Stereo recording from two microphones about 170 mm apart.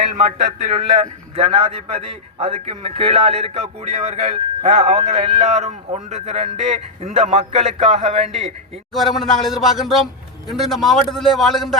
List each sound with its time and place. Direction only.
0.7 s a man's voice: 40° right (ahead or behind)
8.3 s a man's voice: centre (ahead or behind)